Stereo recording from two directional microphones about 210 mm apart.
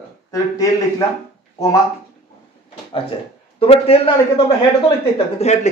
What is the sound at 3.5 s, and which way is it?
Speech, 30° left (ahead or behind).